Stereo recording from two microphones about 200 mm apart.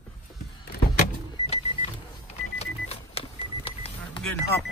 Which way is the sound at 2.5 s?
30° left (ahead or behind).